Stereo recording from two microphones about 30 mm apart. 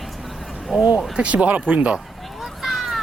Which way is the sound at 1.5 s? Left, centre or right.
Right.